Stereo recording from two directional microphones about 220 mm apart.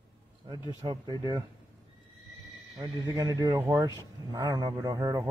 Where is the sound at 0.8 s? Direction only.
20° right (ahead or behind).